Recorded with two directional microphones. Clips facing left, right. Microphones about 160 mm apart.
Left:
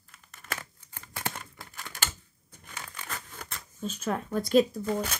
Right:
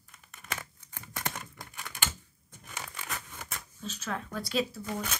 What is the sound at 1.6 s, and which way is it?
Typewriter, 15° right (ahead or behind).